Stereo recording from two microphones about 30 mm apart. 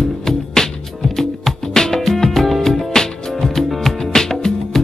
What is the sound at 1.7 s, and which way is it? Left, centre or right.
Music, centre.